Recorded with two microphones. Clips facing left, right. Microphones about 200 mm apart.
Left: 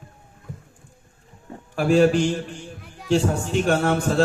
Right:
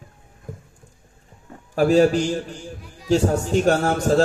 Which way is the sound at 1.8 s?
40° right (ahead or behind).